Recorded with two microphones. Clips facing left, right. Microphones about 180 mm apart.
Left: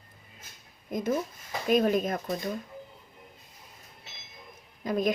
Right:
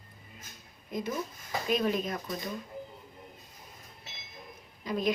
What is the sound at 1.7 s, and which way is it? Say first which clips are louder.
Speech: left 5 dB; 50° left (ahead or behind).